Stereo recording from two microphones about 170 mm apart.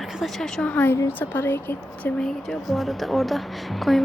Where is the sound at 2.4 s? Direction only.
Centre (ahead or behind).